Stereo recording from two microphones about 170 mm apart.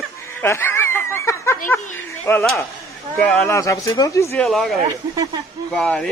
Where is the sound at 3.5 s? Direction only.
20° left (ahead or behind).